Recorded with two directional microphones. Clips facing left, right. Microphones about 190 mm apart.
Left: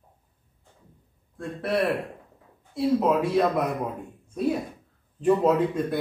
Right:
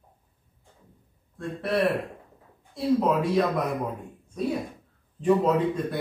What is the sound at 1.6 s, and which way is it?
Speech, centre (ahead or behind).